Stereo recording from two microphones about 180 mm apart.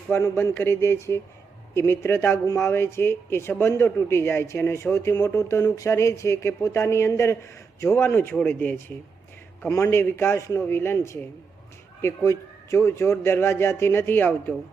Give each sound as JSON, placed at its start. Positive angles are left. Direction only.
{"t": 0.1, "sound": "speech", "side_deg": 15}